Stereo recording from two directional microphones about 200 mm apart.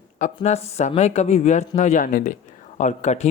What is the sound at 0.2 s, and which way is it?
A man's voice, 35° left (ahead or behind).